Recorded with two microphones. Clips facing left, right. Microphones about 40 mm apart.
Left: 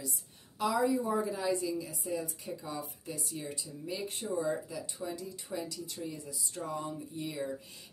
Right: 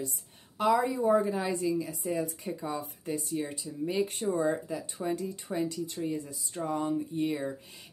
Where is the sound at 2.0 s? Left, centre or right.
Right.